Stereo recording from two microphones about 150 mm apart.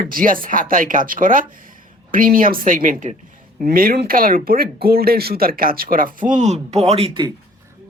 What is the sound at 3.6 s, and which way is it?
Speech, 75° right (ahead or behind).